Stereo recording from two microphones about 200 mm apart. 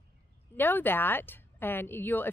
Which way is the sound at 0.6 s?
10° left (ahead or behind).